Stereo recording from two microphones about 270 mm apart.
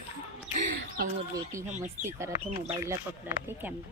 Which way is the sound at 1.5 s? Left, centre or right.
Centre.